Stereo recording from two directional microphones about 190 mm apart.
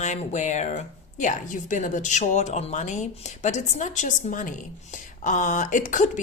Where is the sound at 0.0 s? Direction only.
35° left (ahead or behind).